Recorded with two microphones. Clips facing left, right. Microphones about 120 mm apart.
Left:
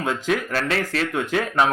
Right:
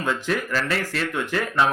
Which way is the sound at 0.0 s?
15° left (ahead or behind).